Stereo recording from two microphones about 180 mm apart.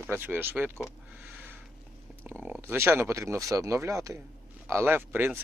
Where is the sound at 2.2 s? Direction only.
10° right (ahead or behind).